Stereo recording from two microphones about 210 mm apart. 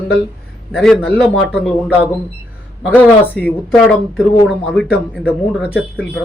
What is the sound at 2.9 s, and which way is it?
Speech, 5° left (ahead or behind).